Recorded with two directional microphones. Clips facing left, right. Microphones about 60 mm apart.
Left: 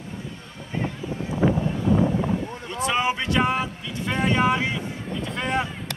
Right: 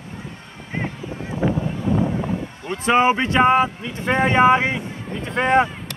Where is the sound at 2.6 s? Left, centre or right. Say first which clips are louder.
Right 9 dB; right.